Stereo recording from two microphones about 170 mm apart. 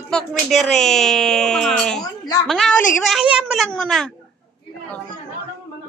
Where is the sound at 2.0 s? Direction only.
20° left (ahead or behind).